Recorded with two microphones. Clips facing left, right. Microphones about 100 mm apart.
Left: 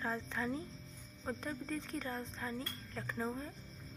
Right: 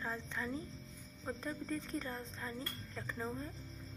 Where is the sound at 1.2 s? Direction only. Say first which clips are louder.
Even; centre (ahead or behind).